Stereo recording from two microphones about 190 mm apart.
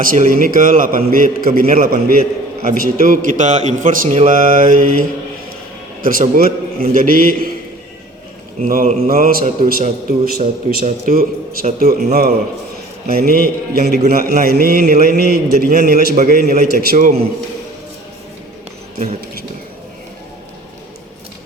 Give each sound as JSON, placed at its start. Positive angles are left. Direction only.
{"t": 0.0, "sound": "a man's voice", "side_deg": -45}
{"t": 8.6, "sound": "a man's voice", "side_deg": -40}
{"t": 13.1, "sound": "a man's voice", "side_deg": -50}
{"t": 18.9, "sound": "a sound", "side_deg": -40}